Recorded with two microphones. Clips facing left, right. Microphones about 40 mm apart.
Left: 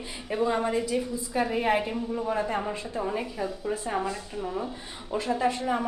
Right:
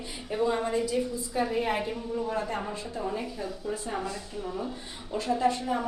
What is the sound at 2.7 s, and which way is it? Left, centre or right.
A woman's voice, left.